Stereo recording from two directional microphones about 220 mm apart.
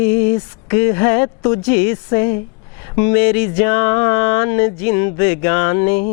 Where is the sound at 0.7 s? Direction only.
20° left (ahead or behind).